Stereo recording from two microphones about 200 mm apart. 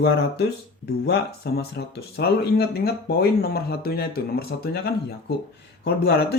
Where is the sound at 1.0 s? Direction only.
55° left (ahead or behind).